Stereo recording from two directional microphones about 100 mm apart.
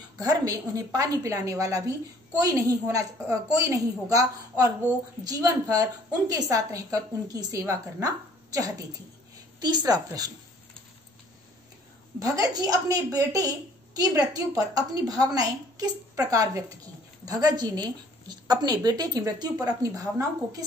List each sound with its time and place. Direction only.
0.2 s a woman's voice: 35° right (ahead or behind)
12.2 s a woman's voice: 40° right (ahead or behind)